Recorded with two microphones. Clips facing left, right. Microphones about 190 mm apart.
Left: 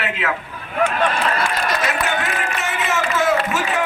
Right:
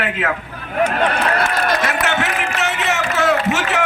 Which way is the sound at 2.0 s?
75° right (ahead or behind).